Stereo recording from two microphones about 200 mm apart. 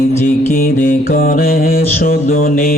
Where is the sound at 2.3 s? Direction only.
45° left (ahead or behind).